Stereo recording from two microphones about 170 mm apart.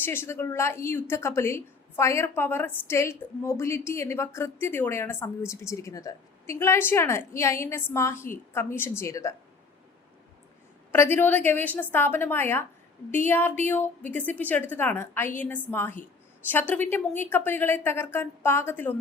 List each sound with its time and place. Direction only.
0.0 s a woman's voice: 15° left (ahead or behind)
10.9 s a woman's voice: 15° left (ahead or behind)